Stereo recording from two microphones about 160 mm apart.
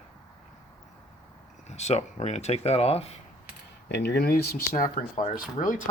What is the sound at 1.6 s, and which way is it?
Speech, 45° left (ahead or behind).